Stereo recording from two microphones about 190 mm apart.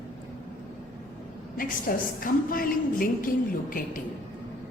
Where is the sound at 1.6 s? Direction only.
45° left (ahead or behind).